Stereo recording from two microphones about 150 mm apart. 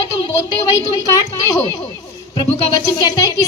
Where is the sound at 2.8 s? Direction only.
20° left (ahead or behind).